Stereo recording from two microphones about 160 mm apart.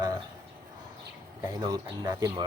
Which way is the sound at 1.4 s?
20° right (ahead or behind).